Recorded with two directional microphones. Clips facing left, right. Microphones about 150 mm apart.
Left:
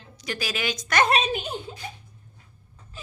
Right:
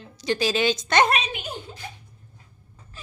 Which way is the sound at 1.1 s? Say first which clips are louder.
Left 4 dB; 35° left (ahead or behind).